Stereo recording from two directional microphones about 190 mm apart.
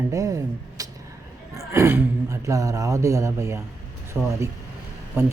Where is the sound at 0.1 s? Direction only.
15° right (ahead or behind).